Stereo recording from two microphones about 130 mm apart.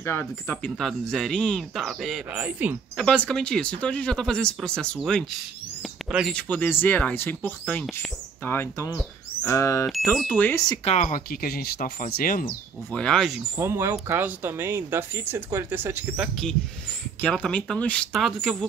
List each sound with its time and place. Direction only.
0.0 s speech: 15° left (ahead or behind); by 2.2 s centre (ahead or behind)
2.3 s speech: 15° right (ahead or behind)
3.0 s speech: 5° left (ahead or behind)
5.8 s a sound: centre (ahead or behind)
6.3 s speech: 10° left (ahead or behind)
9.8 s speech: centre (ahead or behind)
10.3 s speech: 15° left (ahead or behind)
10.8 s speech: 55° left (ahead or behind)
11.8 s speech: 90° left
12.9 s speech: 5° left (ahead or behind)
13.6 s speech: 20° right (ahead or behind)
17.2 s speech: 10° left (ahead or behind)